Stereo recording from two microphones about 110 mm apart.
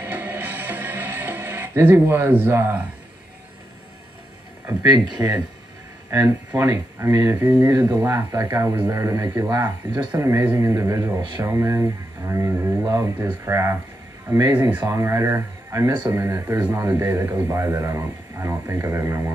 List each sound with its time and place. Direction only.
0.0 s music: 15° right (ahead or behind)
4.8 s speech: 40° right (ahead or behind)
6.0 s speech: 20° right (ahead or behind)
14.5 s speech: 15° right (ahead or behind)
14.9 s speech: 25° right (ahead or behind)